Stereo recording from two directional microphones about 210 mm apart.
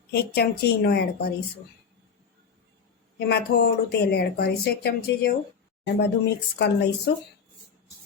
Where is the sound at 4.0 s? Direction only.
50° left (ahead or behind).